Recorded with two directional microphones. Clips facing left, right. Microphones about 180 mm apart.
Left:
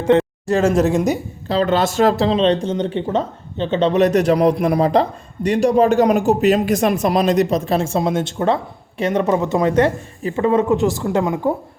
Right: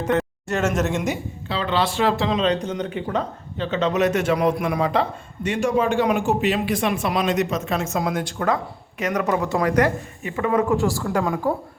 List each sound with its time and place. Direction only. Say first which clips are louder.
0.1 s a woman's voice: left 9 dB; 30° left (ahead or behind)